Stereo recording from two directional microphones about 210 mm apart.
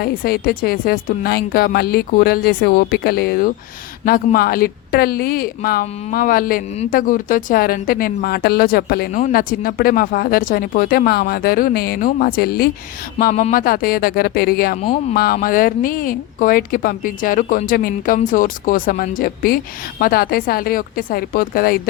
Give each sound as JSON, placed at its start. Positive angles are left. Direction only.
{"t": 0.0, "sound": "a woman's voice", "side_deg": 45}